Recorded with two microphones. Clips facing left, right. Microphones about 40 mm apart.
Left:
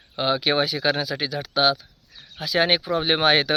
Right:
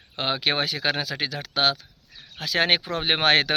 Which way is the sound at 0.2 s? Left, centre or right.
Right.